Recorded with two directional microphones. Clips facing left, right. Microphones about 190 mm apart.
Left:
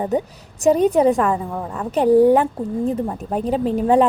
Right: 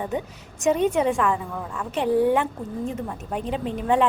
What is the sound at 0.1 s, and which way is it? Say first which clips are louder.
A woman's voice: left 7 dB; 35° left (ahead or behind).